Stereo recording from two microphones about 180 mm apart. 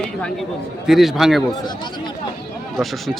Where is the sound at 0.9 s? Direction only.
Centre (ahead or behind).